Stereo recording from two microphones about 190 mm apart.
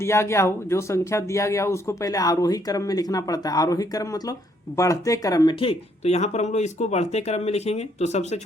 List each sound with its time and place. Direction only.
0.0 s speech: 15° left (ahead or behind); by 8.4 s 35° left (ahead or behind)